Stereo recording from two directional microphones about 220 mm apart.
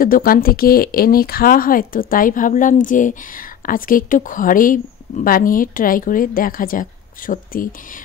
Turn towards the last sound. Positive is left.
turn(degrees=40)  # may be behind; listen again after turning